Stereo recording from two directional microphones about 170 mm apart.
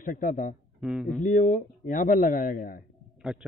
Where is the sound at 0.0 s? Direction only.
50° left (ahead or behind).